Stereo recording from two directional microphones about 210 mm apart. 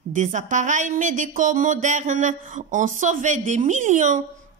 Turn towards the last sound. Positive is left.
turn(degrees=-35)  # may be behind; listen again after turning